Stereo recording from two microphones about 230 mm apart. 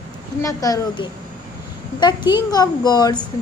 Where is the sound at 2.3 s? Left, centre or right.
Centre.